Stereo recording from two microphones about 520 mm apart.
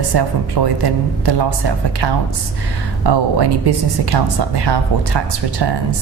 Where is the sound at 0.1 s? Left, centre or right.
Right.